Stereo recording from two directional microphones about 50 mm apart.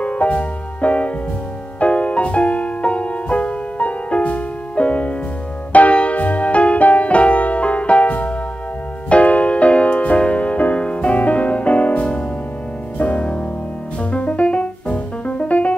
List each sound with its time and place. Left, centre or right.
0.0 s music: left